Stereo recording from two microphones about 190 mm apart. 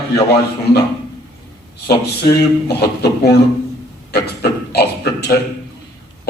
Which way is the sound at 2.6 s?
60° left (ahead or behind).